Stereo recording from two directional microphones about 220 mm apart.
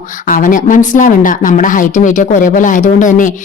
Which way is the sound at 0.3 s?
35° left (ahead or behind).